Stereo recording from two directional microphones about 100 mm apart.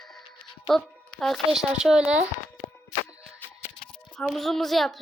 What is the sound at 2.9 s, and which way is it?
Music, 20° left (ahead or behind).